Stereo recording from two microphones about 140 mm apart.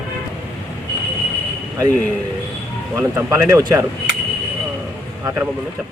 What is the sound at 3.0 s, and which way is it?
Speech, 20° right (ahead or behind).